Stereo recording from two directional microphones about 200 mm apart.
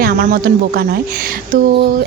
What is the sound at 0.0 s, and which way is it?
A woman's voice, 50° right (ahead or behind).